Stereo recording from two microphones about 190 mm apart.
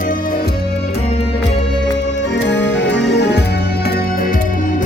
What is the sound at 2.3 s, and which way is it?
Music, 65° left (ahead or behind).